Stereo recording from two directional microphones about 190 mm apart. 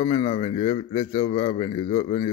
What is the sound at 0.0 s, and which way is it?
A man's voice, 30° left (ahead or behind).